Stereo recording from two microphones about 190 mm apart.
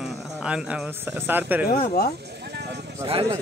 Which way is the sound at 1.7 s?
55° left (ahead or behind).